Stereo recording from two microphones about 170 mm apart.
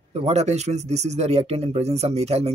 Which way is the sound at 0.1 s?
40° right (ahead or behind).